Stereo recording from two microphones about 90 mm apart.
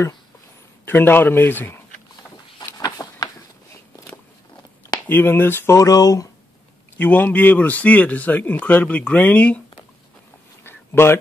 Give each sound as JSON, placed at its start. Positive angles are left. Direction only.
{"t": 0.8, "sound": "a man's voice", "side_deg": 25}
{"t": 2.8, "sound": "a sound", "side_deg": 45}
{"t": 5.0, "sound": "a man's voice", "side_deg": 25}
{"t": 5.8, "sound": "speech", "side_deg": 40}
{"t": 7.0, "sound": "speech", "side_deg": 20}
{"t": 10.6, "sound": "a sound", "side_deg": 25}